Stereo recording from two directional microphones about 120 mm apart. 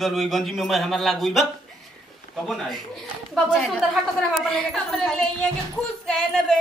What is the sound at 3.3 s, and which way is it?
A woman's voice, centre (ahead or behind).